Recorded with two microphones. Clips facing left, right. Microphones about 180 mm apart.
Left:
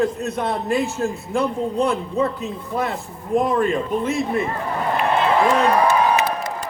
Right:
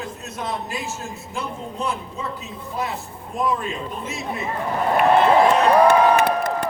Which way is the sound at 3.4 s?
55° left (ahead or behind).